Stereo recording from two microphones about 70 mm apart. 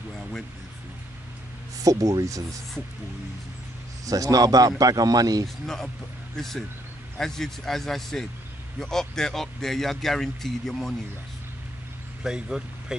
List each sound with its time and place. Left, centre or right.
1.8 s a man's voice: right
4.0 s a man's voice: right
6.3 s speech: centre
12.2 s speech: centre